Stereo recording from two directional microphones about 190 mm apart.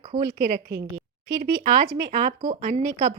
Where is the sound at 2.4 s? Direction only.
40° right (ahead or behind).